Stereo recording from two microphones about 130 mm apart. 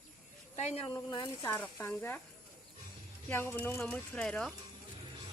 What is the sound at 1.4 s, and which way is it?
Speech, 15° left (ahead or behind).